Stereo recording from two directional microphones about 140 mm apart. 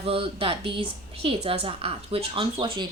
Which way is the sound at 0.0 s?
40° right (ahead or behind).